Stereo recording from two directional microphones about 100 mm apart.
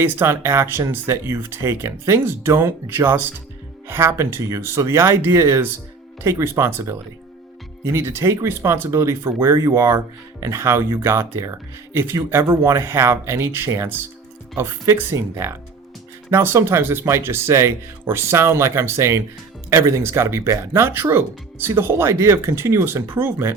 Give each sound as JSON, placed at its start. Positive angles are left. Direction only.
{"t": 0.0, "sound": "speech", "side_deg": -25}